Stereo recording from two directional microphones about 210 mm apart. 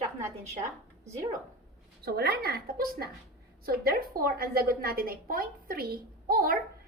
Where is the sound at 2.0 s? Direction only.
50° right (ahead or behind).